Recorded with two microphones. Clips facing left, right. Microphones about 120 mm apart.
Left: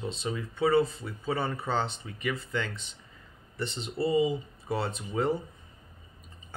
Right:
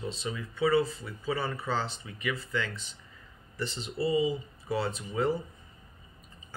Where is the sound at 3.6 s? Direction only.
60° left (ahead or behind).